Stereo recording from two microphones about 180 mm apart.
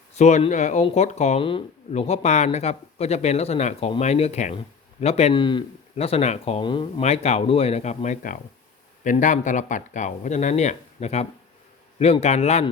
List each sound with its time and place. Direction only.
0.2 s speech: 40° left (ahead or behind)
7.0 s speech: 35° left (ahead or behind)